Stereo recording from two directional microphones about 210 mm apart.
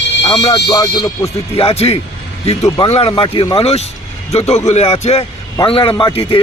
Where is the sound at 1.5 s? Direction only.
30° left (ahead or behind).